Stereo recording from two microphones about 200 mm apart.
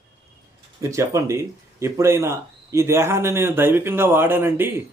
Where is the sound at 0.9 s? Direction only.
15° right (ahead or behind).